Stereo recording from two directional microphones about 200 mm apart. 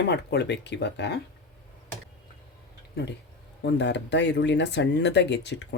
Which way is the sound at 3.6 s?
60° left (ahead or behind).